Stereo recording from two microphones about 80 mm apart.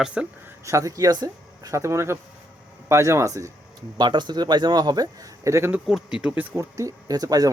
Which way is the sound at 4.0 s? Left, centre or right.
Right.